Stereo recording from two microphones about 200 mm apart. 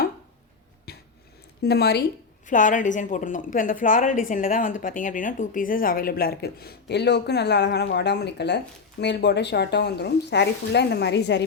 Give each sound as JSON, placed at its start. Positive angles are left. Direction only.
{"t": 0.9, "sound": "a sound", "side_deg": 50}
{"t": 1.6, "sound": "a woman's voice", "side_deg": 55}
{"t": 2.5, "sound": "a woman's voice", "side_deg": 40}